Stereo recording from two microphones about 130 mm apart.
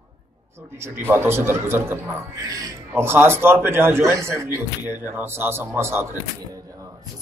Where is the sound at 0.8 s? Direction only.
20° right (ahead or behind).